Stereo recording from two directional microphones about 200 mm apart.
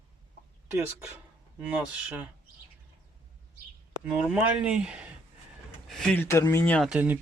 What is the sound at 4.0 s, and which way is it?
Speech, 5° right (ahead or behind).